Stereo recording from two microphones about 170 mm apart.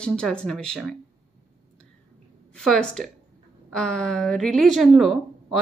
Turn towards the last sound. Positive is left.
turn(degrees=0)  # may be behind; listen again after turning